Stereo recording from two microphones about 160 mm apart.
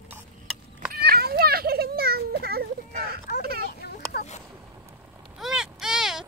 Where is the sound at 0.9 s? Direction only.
75° right (ahead or behind).